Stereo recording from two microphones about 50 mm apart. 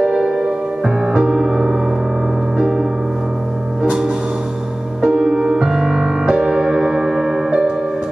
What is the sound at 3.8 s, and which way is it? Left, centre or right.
Music, centre.